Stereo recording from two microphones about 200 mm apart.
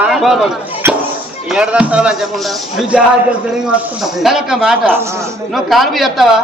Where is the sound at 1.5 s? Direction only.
5° right (ahead or behind).